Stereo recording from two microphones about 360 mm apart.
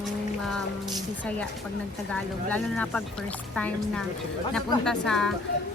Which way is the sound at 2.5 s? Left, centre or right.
Centre.